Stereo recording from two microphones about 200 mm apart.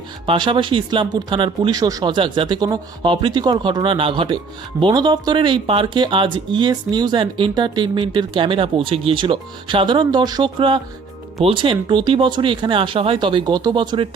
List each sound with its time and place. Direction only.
0.3 s speech: 25° right (ahead or behind)